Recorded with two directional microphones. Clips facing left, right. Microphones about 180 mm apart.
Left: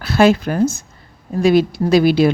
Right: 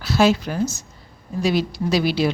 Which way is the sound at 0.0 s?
55° left (ahead or behind).